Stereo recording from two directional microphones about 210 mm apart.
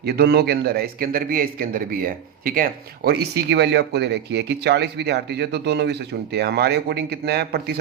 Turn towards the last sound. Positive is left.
turn(degrees=-50)  # may be behind; listen again after turning